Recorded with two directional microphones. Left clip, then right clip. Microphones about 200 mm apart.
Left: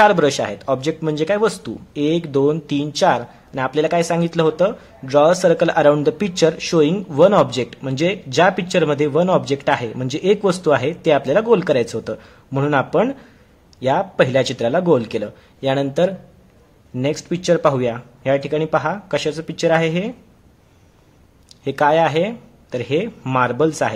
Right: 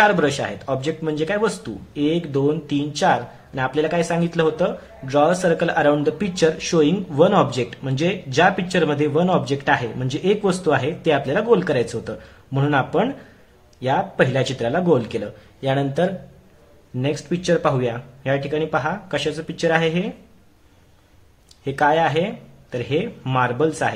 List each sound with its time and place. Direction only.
0.0 s speech: 40° left (ahead or behind)
21.6 s speech: 35° left (ahead or behind)